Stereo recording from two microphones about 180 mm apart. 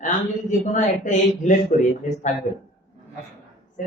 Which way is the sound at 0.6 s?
45° left (ahead or behind).